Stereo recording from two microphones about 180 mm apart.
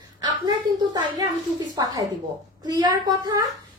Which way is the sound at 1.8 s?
20° right (ahead or behind).